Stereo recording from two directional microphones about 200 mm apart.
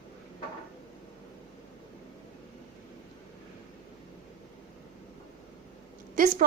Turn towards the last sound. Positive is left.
turn(degrees=-40)  # may be behind; listen again after turning